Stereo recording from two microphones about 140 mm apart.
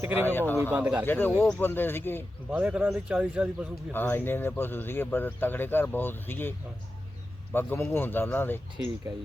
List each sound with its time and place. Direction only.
0.0 s speech: 15° right (ahead or behind)
1.0 s speech: 15° left (ahead or behind)
2.5 s speech: 10° right (ahead or behind)
3.9 s speech: 15° left (ahead or behind)
7.5 s speech: 15° left (ahead or behind)